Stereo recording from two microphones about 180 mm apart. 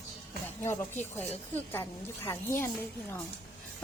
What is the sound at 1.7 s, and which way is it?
Speech, 15° left (ahead or behind).